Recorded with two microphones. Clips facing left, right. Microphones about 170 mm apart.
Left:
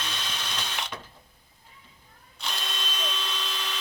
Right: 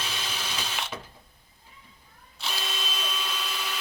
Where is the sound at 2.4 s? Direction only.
5° right (ahead or behind).